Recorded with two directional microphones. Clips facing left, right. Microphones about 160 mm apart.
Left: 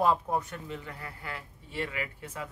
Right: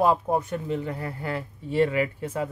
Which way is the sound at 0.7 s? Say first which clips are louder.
Right 11 dB; 30° right (ahead or behind).